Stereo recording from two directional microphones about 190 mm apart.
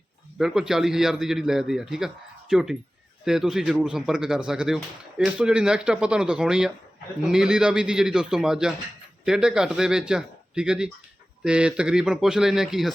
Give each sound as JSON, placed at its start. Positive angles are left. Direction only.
{"t": 0.3, "sound": "speech", "side_deg": 0}